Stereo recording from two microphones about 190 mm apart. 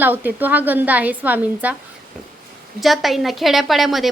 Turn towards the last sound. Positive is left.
turn(degrees=0)  # may be behind; listen again after turning